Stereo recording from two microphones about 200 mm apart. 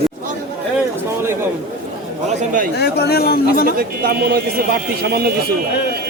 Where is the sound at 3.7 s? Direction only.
50° right (ahead or behind).